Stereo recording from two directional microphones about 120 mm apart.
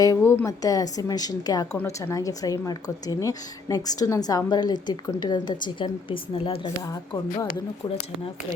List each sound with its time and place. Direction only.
0.0 s speech: 25° left (ahead or behind); by 6.7 s 50° left (ahead or behind)
6.8 s speech: 30° left (ahead or behind)
7.5 s speech: 50° left (ahead or behind)